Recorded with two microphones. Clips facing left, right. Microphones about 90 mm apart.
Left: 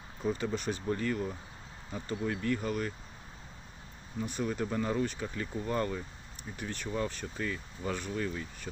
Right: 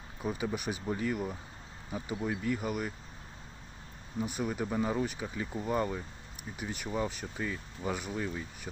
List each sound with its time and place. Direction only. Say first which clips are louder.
0.2 s speech: left 2 dB; 10° right (ahead or behind)
4.2 s speech: even; 15° right (ahead or behind)